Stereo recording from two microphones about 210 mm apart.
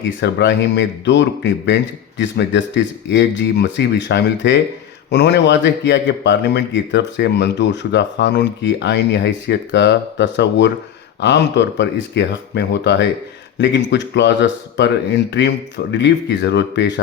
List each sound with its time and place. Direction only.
0.2 s speech: 55° left (ahead or behind)